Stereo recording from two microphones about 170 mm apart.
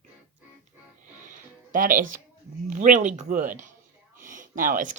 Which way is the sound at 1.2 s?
50° right (ahead or behind).